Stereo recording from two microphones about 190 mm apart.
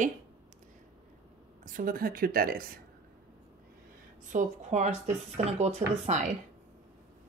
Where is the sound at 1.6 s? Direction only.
45° right (ahead or behind).